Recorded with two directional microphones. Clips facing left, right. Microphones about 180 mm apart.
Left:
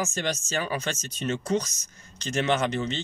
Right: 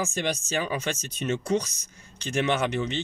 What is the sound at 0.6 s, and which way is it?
Speech, 40° left (ahead or behind).